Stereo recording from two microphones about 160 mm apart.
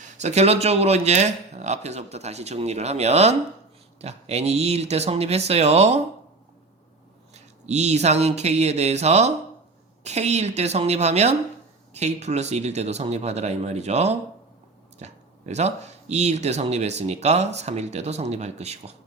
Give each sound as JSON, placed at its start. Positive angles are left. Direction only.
{"t": 0.0, "sound": "a man's voice", "side_deg": -45}
{"t": 7.3, "sound": "a man's voice", "side_deg": -45}